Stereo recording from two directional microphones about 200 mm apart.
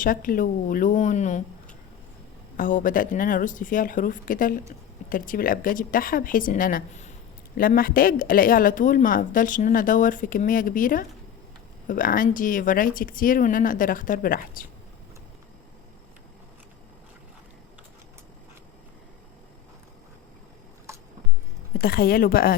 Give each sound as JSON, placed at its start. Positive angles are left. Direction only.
{"t": 0.0, "sound": "a woman's voice", "side_deg": 45}
{"t": 2.6, "sound": "a woman's voice", "side_deg": 40}
{"t": 20.9, "sound": "a sound", "side_deg": -15}
{"t": 21.8, "sound": "a woman's voice", "side_deg": 50}